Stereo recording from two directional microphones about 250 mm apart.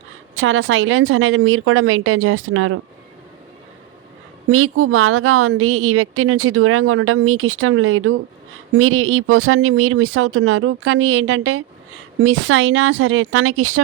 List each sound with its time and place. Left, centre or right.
0.3 s a woman's voice: right
4.4 s a woman's voice: right